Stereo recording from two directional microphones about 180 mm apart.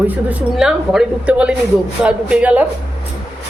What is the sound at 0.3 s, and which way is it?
A man's voice, centre (ahead or behind).